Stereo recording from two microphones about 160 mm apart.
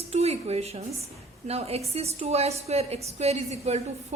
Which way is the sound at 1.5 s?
40° right (ahead or behind).